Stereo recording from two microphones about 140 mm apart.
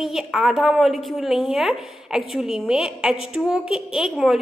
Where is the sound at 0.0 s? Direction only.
5° right (ahead or behind).